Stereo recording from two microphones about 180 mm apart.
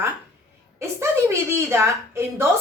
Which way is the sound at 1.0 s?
15° right (ahead or behind).